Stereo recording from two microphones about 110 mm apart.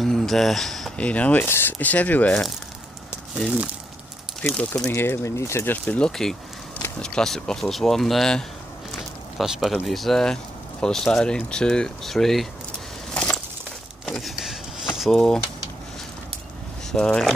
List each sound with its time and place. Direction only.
0.0 s speech: centre (ahead or behind)
3.3 s speech: 5° right (ahead or behind)
4.4 s speech: 10° left (ahead or behind)
4.9 s speech: 25° left (ahead or behind); by 12.4 s 5° left (ahead or behind)
13.1 s a sound: 10° left (ahead or behind)
15.0 s speech: centre (ahead or behind)
16.9 s speech: 5° left (ahead or behind)